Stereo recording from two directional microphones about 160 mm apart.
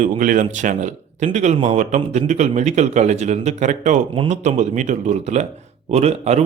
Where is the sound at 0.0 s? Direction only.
50° right (ahead or behind).